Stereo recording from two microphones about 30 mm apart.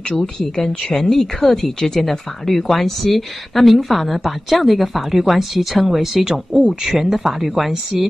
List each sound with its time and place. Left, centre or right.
0.1 s speech: left
0.6 s speech: centre
6.2 s speech: right; by 8.1 s centre